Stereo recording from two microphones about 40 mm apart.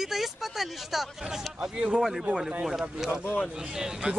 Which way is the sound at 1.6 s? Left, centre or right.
Centre.